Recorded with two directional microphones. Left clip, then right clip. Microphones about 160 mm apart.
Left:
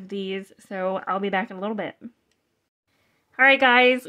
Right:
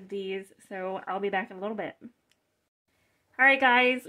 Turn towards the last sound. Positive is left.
turn(degrees=25)  # may be behind; listen again after turning